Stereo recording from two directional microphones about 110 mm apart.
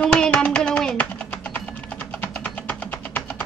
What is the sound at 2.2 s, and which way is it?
Music, 15° left (ahead or behind).